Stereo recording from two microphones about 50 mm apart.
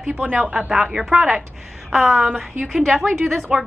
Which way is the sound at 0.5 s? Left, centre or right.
Centre.